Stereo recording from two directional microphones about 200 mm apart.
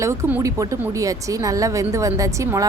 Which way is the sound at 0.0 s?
15° right (ahead or behind).